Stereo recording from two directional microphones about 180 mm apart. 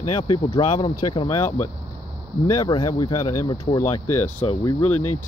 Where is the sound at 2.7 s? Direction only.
20° left (ahead or behind).